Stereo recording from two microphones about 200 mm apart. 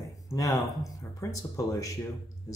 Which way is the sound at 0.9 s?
15° left (ahead or behind).